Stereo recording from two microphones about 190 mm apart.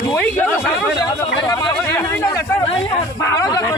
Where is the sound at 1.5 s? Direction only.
20° left (ahead or behind).